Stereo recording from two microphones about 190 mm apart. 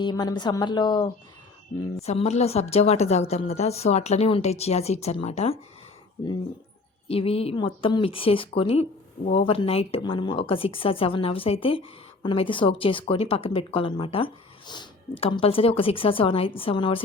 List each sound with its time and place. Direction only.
0.0 s speech: 20° left (ahead or behind)
2.0 s a woman's voice: 35° left (ahead or behind)
7.1 s speech: 30° left (ahead or behind)